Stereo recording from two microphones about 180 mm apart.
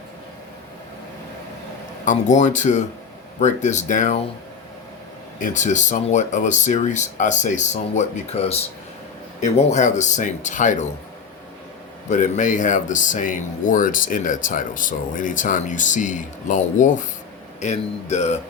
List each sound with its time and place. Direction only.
2.0 s speech: 45° left (ahead or behind)
5.4 s speech: 45° left (ahead or behind)
12.0 s speech: 40° left (ahead or behind)